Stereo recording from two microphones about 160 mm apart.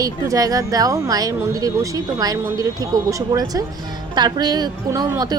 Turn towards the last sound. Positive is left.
turn(degrees=-25)  # may be behind; listen again after turning